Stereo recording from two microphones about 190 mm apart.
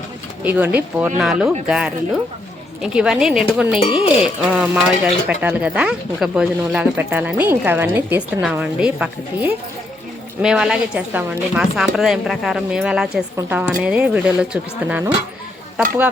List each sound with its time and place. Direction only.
0.4 s speech: 10° right (ahead or behind)
3.8 s speech: 30° left (ahead or behind)
4.5 s speech: 5° right (ahead or behind)